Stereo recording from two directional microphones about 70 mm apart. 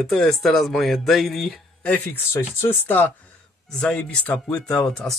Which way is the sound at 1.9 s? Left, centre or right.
Left.